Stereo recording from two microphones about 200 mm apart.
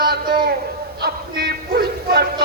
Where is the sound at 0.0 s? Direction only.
50° right (ahead or behind).